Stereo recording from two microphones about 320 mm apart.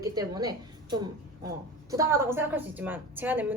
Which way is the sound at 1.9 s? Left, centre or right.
Centre.